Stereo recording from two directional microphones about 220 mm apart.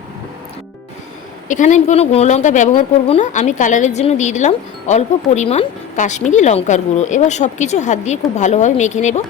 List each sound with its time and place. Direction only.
1.5 s a woman's voice: 35° left (ahead or behind)